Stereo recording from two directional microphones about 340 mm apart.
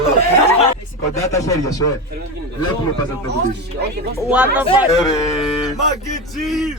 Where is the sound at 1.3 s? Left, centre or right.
Centre.